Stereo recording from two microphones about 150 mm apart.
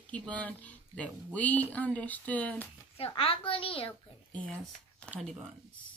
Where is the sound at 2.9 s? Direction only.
40° left (ahead or behind).